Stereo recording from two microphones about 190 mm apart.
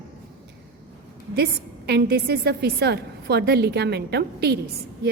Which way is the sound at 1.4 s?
60° right (ahead or behind).